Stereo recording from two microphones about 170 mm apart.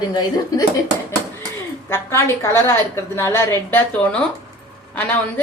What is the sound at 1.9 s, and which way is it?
A woman's voice, 15° left (ahead or behind).